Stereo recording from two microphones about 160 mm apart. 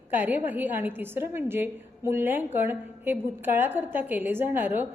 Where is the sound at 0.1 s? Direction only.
10° right (ahead or behind).